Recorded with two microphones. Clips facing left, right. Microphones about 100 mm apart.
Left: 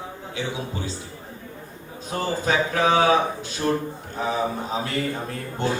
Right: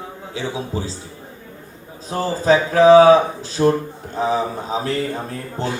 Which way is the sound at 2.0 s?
30° right (ahead or behind).